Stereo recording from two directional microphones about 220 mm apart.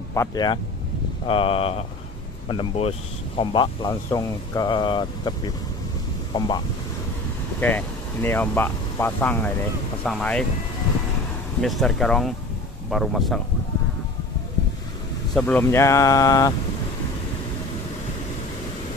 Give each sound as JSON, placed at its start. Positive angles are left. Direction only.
{"t": 0.1, "sound": "speech", "side_deg": 15}
{"t": 7.6, "sound": "speech", "side_deg": 10}
{"t": 11.6, "sound": "speech", "side_deg": 0}
{"t": 15.3, "sound": "speech", "side_deg": 5}